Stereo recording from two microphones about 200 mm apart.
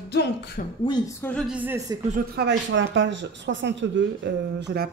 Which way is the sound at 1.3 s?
Centre (ahead or behind).